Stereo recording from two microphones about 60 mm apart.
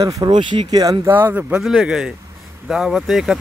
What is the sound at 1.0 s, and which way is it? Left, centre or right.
Speech, right.